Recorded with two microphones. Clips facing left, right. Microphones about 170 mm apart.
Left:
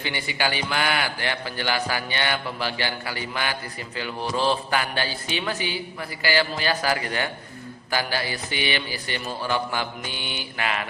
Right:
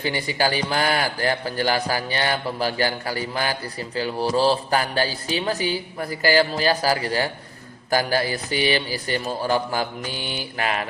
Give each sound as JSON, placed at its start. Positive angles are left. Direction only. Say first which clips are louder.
{"t": 0.0, "sound": "a man's voice", "louder": "right 4 dB", "side_deg": -40}